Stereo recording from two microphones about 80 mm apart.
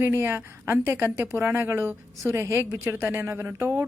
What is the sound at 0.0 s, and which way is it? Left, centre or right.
A woman's voice, right.